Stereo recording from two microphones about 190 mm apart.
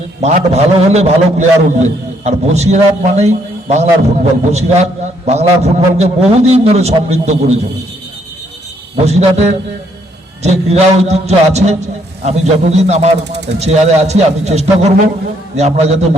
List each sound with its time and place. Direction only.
0.2 s a man's voice: 35° right (ahead or behind)
9.0 s a man's voice: 35° right (ahead or behind)